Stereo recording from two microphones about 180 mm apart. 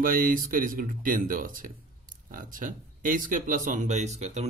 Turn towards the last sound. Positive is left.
turn(degrees=-40)  # may be behind; listen again after turning